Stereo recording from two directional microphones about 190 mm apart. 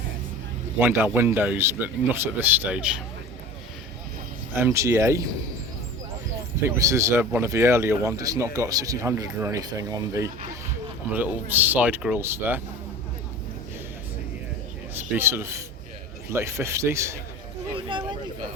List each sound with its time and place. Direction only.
0.8 s speech: 10° right (ahead or behind)
4.5 s speech: 15° right (ahead or behind)
6.7 s speech: 15° right (ahead or behind)
11.4 s speech: 10° right (ahead or behind)
14.9 s speech: 10° right (ahead or behind)
17.7 s a sound: 25° right (ahead or behind)